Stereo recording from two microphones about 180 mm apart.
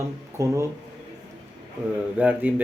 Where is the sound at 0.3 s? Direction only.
15° right (ahead or behind).